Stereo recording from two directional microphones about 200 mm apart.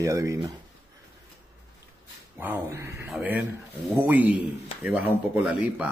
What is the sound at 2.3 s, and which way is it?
Speech, 10° right (ahead or behind).